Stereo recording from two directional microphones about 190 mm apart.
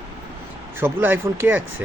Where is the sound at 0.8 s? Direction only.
10° right (ahead or behind).